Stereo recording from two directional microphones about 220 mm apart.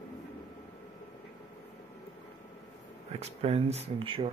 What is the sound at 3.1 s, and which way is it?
Speech, 25° right (ahead or behind).